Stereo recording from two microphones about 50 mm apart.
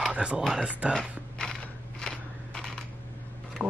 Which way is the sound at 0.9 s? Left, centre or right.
Centre.